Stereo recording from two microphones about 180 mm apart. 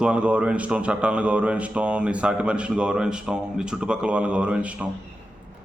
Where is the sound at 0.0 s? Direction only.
5° right (ahead or behind).